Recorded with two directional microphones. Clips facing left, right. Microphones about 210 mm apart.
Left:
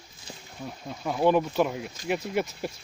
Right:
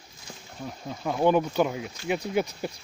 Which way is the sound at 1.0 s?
Centre (ahead or behind).